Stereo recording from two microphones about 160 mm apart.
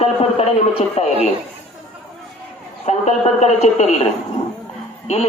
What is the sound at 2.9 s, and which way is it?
A man's voice, 45° left (ahead or behind).